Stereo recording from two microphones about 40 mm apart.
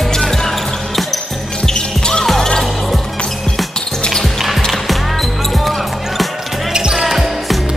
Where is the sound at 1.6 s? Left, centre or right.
Centre.